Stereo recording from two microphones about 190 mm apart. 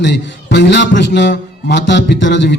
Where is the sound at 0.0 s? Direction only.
70° left (ahead or behind).